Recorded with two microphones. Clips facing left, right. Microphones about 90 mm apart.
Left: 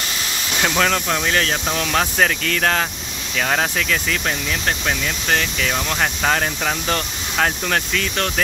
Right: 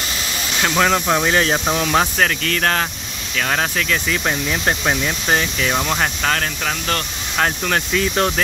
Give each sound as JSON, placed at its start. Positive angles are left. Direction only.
{"t": 0.6, "sound": "speech", "side_deg": -5}
{"t": 1.0, "sound": "speech", "side_deg": -20}
{"t": 2.1, "sound": "speech", "side_deg": 5}
{"t": 4.3, "sound": "speech", "side_deg": -20}
{"t": 6.2, "sound": "speech", "side_deg": 10}
{"t": 7.3, "sound": "speech", "side_deg": 0}
{"t": 7.9, "sound": "speech", "side_deg": -15}